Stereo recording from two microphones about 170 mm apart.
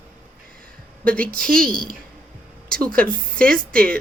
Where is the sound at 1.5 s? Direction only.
55° right (ahead or behind).